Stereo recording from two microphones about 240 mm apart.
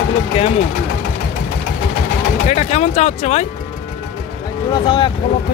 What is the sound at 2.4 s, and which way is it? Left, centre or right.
Speech, left.